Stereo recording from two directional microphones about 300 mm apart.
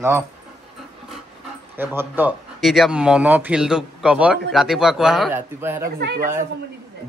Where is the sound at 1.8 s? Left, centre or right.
Centre.